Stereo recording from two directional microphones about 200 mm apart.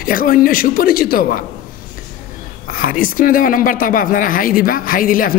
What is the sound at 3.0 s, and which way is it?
Speech, 45° left (ahead or behind).